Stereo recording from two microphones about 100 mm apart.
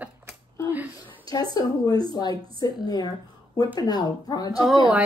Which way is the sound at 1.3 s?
40° left (ahead or behind).